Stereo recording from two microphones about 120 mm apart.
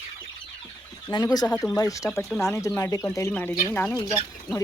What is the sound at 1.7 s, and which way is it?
Speech, 30° left (ahead or behind).